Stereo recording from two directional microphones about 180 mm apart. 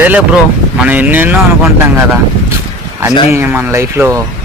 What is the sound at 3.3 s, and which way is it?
Speech, 15° right (ahead or behind).